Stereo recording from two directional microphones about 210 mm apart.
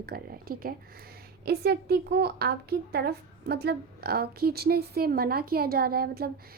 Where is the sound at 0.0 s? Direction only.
45° right (ahead or behind).